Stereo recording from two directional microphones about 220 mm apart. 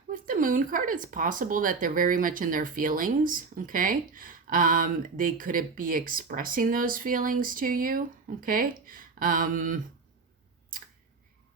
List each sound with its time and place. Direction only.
0.1 s speech: 35° right (ahead or behind)